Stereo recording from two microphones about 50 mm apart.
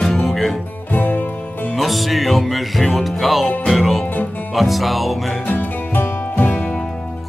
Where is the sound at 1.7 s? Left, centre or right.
Centre.